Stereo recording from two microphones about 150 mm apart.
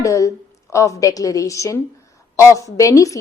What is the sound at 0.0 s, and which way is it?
A woman's voice, 20° left (ahead or behind).